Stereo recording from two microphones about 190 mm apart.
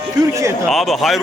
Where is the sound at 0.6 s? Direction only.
Centre (ahead or behind).